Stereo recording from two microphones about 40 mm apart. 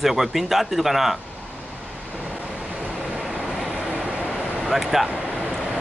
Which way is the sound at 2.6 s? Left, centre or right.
Right.